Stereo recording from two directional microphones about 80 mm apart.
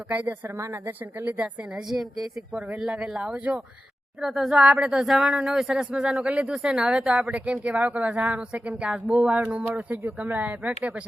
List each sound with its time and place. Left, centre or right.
0.1 s speech: centre
0.4 s speech: right
1.2 s speech: centre